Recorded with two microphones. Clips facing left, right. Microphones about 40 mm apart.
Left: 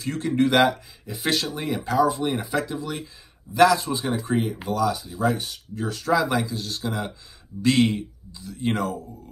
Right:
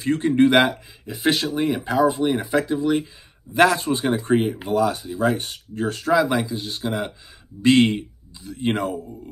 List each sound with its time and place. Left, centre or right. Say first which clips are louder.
0.0 s speech: right 5 dB; right; by 3.1 s centre
3.5 s speech: right 1 dB; right
6.1 s speech: right 3 dB; centre